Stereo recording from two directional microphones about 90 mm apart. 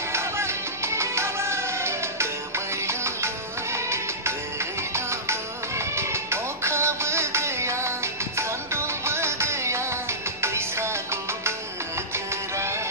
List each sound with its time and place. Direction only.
0.1 s music: 30° right (ahead or behind)
5.9 s music: 30° right (ahead or behind)